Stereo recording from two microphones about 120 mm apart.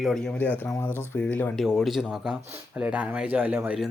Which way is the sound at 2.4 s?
20° right (ahead or behind).